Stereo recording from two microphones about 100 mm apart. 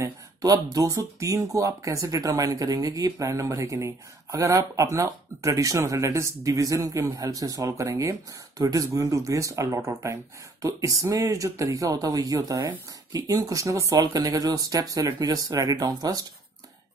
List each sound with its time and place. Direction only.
0.0 s speech: 40° right (ahead or behind)